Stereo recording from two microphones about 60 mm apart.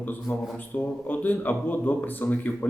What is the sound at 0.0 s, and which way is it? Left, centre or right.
A man's voice, left.